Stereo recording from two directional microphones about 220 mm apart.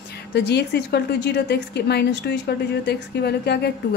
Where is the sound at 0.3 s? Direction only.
50° left (ahead or behind).